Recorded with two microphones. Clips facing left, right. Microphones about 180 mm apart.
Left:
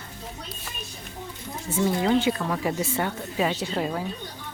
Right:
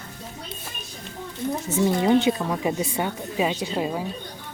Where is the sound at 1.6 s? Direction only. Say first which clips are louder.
Right 2 dB; 20° right (ahead or behind).